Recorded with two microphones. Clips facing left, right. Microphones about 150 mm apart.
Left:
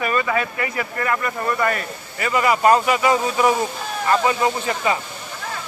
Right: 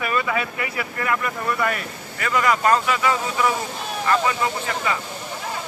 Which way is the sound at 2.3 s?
10° left (ahead or behind).